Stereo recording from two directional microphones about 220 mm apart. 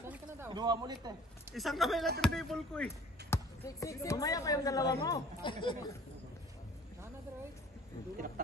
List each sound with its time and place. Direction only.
0.0 s speech: 10° right (ahead or behind)
1.5 s speech: centre (ahead or behind); by 5.9 s 20° left (ahead or behind)